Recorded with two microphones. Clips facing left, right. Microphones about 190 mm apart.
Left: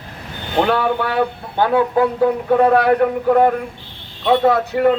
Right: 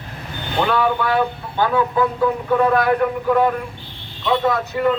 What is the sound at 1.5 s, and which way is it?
Speech, 60° left (ahead or behind).